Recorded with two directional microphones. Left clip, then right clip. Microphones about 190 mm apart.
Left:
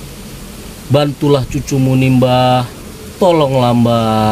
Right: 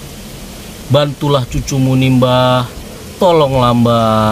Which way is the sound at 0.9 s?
Centre (ahead or behind).